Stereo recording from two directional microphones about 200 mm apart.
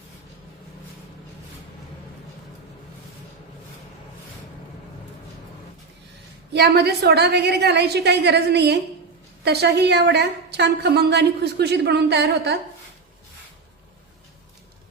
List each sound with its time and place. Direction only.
6.5 s a woman's voice: 55° right (ahead or behind)